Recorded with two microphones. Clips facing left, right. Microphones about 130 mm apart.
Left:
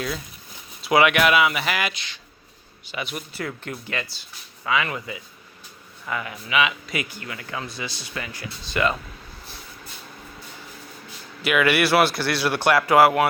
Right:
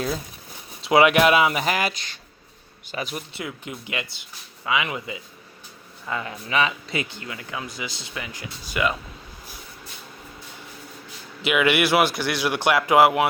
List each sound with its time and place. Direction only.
0.8 s speech: 25° right (ahead or behind)
3.3 s speech: 15° right (ahead or behind)
11.4 s speech: 20° right (ahead or behind)